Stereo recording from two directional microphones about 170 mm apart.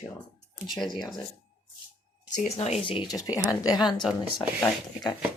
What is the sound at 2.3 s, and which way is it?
Speech, 40° left (ahead or behind).